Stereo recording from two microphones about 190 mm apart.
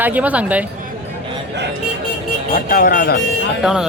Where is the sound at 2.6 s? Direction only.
45° left (ahead or behind).